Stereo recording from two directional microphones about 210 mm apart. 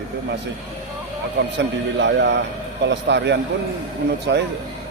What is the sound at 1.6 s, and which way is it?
Speech, 55° right (ahead or behind).